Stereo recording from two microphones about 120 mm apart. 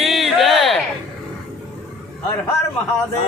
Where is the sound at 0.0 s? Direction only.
Centre (ahead or behind).